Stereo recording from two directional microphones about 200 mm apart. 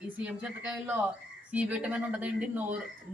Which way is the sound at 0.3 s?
5° right (ahead or behind).